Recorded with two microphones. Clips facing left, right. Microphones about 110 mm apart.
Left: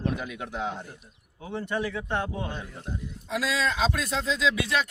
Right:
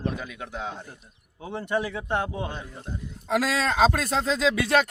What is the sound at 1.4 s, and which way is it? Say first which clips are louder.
A man's voice: right 2 dB; 20° right (ahead or behind).